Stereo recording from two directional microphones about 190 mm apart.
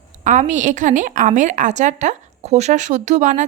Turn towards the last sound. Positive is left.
turn(degrees=-40)  # may be behind; listen again after turning